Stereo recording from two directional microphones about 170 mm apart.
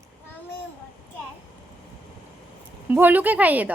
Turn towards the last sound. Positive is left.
turn(degrees=-10)  # may be behind; listen again after turning